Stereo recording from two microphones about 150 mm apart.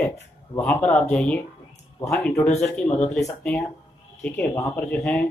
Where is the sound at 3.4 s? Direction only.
5° left (ahead or behind).